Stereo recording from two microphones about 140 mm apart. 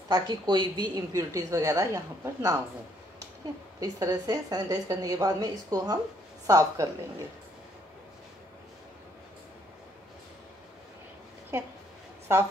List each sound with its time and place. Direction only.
0.1 s a woman's voice: 30° right (ahead or behind)
3.8 s a woman's voice: 25° right (ahead or behind)
12.3 s a woman's voice: 20° right (ahead or behind)